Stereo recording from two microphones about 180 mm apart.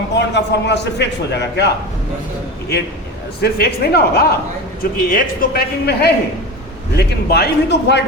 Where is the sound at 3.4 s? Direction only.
60° left (ahead or behind).